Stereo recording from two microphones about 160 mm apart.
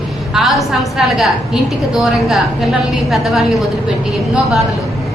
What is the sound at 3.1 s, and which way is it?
Speech, centre (ahead or behind).